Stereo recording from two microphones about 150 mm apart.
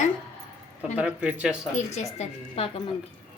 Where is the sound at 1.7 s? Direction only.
50° left (ahead or behind).